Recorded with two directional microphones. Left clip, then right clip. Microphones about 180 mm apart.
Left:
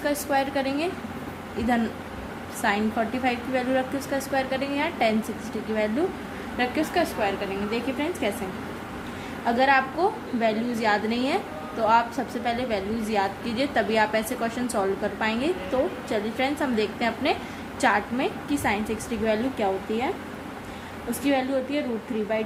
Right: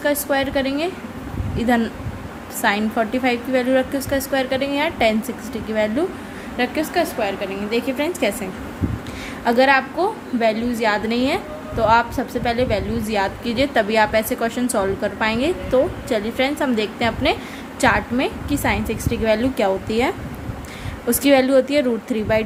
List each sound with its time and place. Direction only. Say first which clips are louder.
0.0 s a woman's voice: right 5 dB; 20° right (ahead or behind)
6.6 s a woman's voice: right 4 dB; 25° right (ahead or behind)
9.4 s a woman's voice: right 5 dB; 30° right (ahead or behind)
21.2 s a woman's voice: right 10 dB; 40° right (ahead or behind)